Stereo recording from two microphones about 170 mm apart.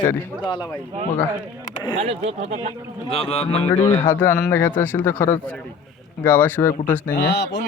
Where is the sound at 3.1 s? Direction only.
35° left (ahead or behind).